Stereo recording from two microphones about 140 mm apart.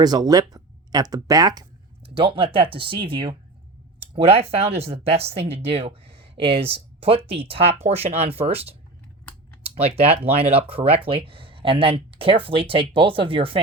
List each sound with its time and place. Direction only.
0.0 s speech: 30° right (ahead or behind)
2.1 s speech: 40° right (ahead or behind)
9.8 s speech: 45° right (ahead or behind)